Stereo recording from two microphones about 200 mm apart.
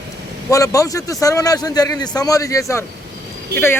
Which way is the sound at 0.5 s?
15° left (ahead or behind).